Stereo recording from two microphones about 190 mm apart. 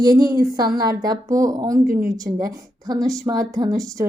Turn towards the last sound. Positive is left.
turn(degrees=-20)  # may be behind; listen again after turning